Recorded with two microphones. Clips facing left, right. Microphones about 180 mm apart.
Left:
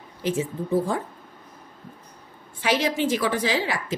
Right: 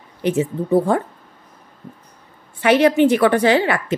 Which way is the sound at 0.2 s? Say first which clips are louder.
Right 6 dB; 70° right (ahead or behind).